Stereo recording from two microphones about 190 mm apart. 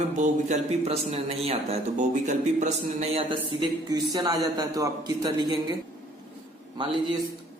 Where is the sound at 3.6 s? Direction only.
20° right (ahead or behind).